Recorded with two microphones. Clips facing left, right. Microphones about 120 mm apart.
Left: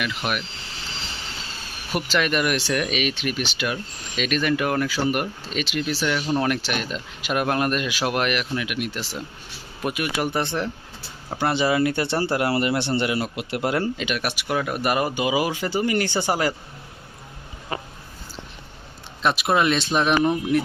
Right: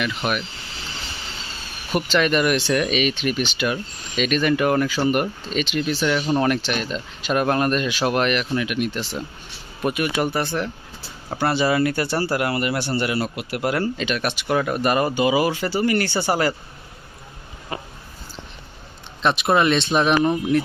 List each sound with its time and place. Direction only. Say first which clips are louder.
0.0 s speech: right 3 dB; centre (ahead or behind)
2.0 s speech: right 3 dB; 5° left (ahead or behind)
10.3 s a man's voice: right 1 dB; 20° left (ahead or behind)
19.2 s speech: right 2 dB; 5° left (ahead or behind)